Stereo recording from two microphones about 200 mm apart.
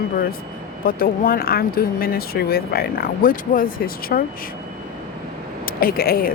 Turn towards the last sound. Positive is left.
turn(degrees=45)  # may be behind; listen again after turning